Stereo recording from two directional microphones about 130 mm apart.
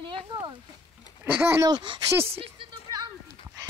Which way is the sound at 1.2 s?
15° right (ahead or behind).